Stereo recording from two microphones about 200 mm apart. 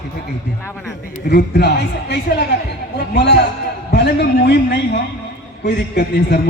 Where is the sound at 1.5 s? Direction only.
55° left (ahead or behind).